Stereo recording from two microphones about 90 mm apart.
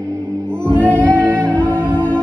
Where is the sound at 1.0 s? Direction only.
15° left (ahead or behind).